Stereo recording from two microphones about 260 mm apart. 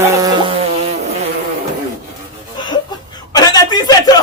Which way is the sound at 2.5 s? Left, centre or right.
Centre.